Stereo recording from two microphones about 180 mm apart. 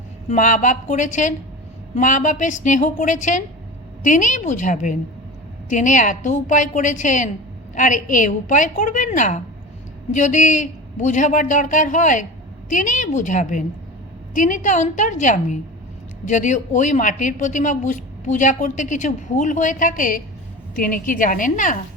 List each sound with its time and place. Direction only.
0.3 s a woman's voice: 45° left (ahead or behind)